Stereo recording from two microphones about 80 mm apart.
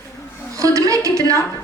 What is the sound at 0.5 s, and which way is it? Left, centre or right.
Speech, right.